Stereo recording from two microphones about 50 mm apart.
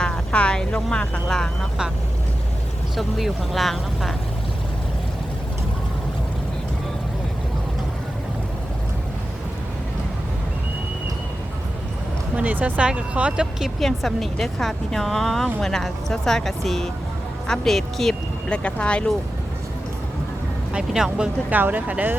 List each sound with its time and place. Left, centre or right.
0.0 s speech: left
2.9 s a woman's voice: centre
12.3 s speech: right
13.3 s speech: centre
13.7 s a woman's voice: centre
18.1 s speech: left
20.9 s speech: centre
21.5 s speech: right